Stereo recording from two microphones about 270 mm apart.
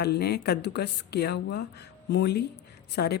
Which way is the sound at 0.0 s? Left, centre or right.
Left.